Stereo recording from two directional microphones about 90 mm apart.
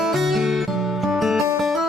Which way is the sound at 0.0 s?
Centre (ahead or behind).